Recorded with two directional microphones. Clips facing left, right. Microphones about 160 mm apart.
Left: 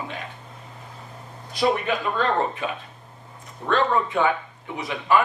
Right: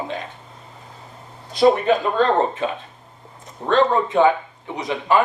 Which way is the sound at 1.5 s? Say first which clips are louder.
Right 7 dB; 35° right (ahead or behind).